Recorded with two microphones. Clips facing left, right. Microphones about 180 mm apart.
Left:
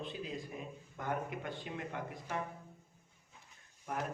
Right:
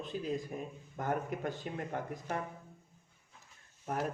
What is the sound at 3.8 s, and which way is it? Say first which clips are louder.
Speech: right 4 dB; 40° right (ahead or behind).